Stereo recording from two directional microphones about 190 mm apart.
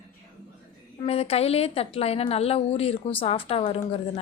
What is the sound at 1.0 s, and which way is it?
A woman's voice, 30° left (ahead or behind).